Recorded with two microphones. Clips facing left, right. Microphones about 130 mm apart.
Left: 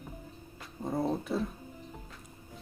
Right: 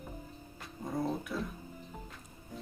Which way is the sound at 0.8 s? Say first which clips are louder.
Left 3 dB; 25° left (ahead or behind).